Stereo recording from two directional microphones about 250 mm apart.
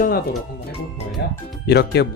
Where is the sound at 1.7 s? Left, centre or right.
Left.